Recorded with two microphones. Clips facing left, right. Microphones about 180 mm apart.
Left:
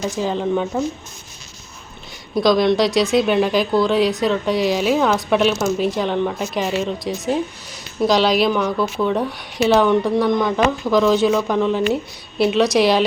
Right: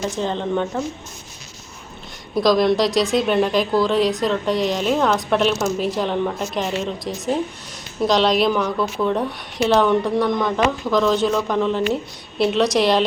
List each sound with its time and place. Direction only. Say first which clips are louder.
0.2 s speech: left 3 dB; 5° left (ahead or behind)
2.3 s speech: left 1 dB; centre (ahead or behind)